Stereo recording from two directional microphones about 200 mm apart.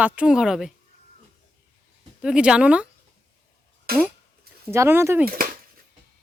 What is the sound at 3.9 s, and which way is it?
Speech, 50° right (ahead or behind).